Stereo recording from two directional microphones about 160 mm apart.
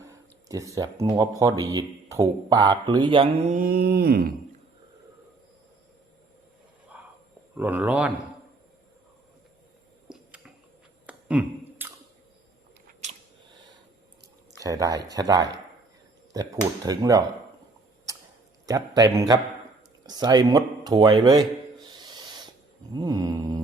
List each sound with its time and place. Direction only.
0.1 s speech: 20° right (ahead or behind)
3.5 s mantra: 65° right (ahead or behind)
6.9 s a sound: 10° right (ahead or behind)
7.5 s speech: 10° right (ahead or behind)
10.1 s squish: 5° right (ahead or behind)
11.0 s a sound: 10° right (ahead or behind)
13.0 s biting: 45° right (ahead or behind)
14.6 s speech: 20° right (ahead or behind)
18.6 s speech: 25° right (ahead or behind)
20.1 s a sound: 25° right (ahead or behind)
23.0 s mantra: 25° right (ahead or behind)